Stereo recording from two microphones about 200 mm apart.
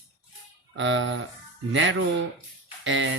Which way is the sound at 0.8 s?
70° right (ahead or behind).